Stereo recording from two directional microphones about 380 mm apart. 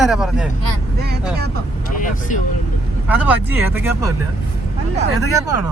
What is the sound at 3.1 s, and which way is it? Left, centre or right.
Speech, centre.